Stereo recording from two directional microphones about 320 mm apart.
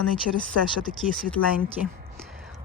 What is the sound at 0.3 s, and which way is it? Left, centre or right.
Speech, left.